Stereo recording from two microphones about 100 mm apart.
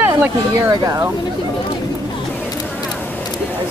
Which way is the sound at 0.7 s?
35° right (ahead or behind).